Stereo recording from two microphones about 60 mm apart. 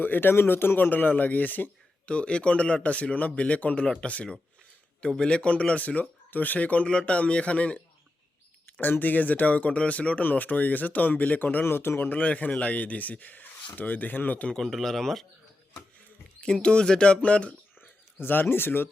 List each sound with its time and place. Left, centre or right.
0.0 s speech: left
2.0 s speech: centre
8.8 s speech: left
11.6 s speech: left
14.4 s speech: centre
16.4 s speech: centre
17.7 s a sound: left